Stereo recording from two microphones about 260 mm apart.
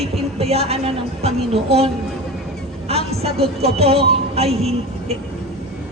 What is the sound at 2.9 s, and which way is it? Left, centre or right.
Speech, right.